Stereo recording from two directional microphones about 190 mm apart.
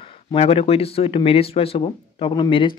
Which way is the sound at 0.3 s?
30° left (ahead or behind).